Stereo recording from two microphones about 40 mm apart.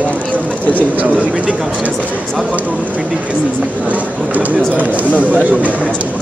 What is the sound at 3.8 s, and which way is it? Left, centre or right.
Speech, right.